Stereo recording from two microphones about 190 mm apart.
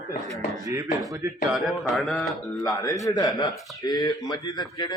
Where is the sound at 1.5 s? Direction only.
Centre (ahead or behind).